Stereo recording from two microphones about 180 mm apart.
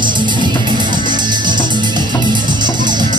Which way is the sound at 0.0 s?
25° right (ahead or behind).